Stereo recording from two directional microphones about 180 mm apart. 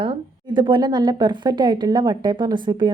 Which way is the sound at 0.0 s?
30° right (ahead or behind).